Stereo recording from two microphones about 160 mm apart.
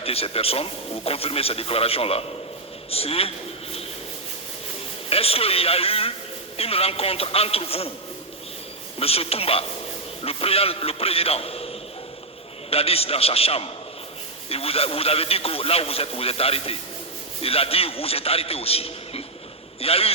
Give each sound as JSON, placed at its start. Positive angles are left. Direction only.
{"t": 0.0, "sound": "a man's voice", "side_deg": 40}
{"t": 5.0, "sound": "a man's voice", "side_deg": 40}
{"t": 9.0, "sound": "a man's voice", "side_deg": 40}